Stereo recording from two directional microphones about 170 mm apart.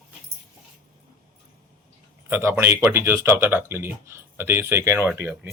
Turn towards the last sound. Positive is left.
turn(degrees=-15)  # may be behind; listen again after turning